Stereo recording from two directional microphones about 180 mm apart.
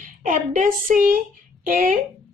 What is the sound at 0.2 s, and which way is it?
A woman's voice, 45° right (ahead or behind).